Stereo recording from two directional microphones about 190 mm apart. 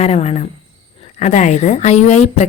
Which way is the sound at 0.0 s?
35° left (ahead or behind).